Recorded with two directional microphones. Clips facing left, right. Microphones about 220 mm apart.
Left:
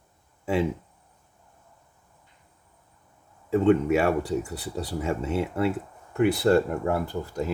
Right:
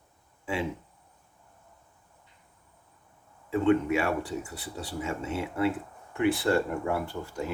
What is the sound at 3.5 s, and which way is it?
Speech, 40° left (ahead or behind).